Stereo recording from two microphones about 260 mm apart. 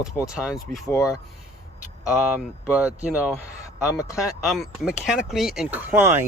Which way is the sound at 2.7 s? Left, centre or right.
Centre.